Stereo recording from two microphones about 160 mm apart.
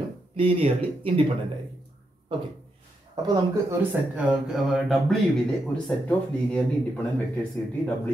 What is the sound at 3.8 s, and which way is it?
Speech, 5° right (ahead or behind).